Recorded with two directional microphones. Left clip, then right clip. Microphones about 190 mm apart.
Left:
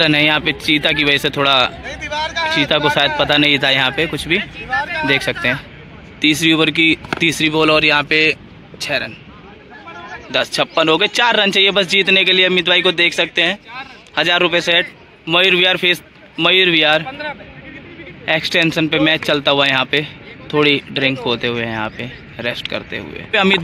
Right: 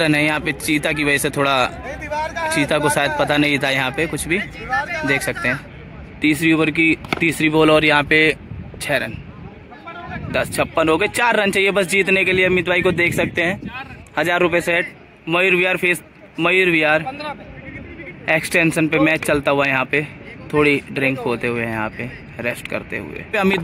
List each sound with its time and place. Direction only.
0.0 s speech: 5° right (ahead or behind)
1.9 s speech: 40° right (ahead or behind)
2.7 s speech: 5° right (ahead or behind)
10.3 s a man's voice: 5° right (ahead or behind)
18.2 s speech: 5° right (ahead or behind)